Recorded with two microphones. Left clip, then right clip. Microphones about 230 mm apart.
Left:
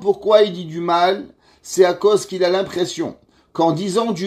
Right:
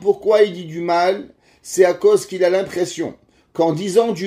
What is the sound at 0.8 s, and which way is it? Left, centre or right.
Speech, left.